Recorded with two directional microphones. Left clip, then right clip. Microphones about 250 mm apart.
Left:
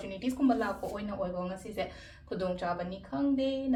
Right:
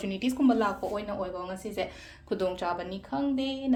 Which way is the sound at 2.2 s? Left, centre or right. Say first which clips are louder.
Right 4 dB; right.